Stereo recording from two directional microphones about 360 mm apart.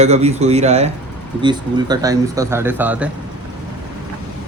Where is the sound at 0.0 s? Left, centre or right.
Centre.